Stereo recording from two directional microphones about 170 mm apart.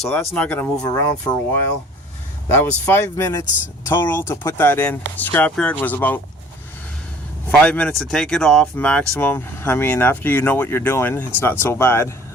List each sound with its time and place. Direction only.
0.0 s speech: 10° left (ahead or behind)
7.6 s speech: 5° left (ahead or behind)